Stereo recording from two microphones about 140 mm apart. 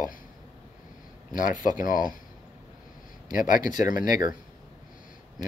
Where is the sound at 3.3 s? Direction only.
75° left (ahead or behind).